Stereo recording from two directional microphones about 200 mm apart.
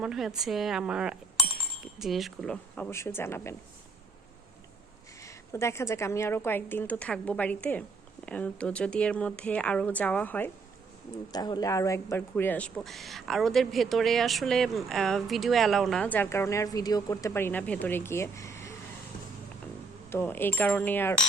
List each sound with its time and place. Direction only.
0.0 s speech: 5° right (ahead or behind)
5.2 s speech: 15° left (ahead or behind)
11.3 s speech: 20° left (ahead or behind)
20.1 s speech: 10° left (ahead or behind)